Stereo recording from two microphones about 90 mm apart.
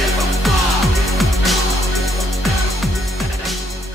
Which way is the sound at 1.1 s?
Centre (ahead or behind).